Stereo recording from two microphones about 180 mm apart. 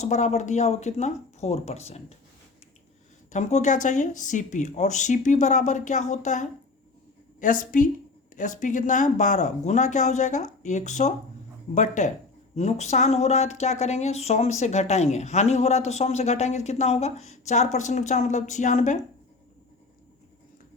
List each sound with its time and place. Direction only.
0.0 s speech: 40° left (ahead or behind)
3.3 s speech: 40° left (ahead or behind)